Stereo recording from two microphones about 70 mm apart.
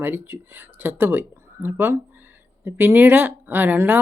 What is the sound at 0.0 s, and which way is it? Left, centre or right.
Speech, right.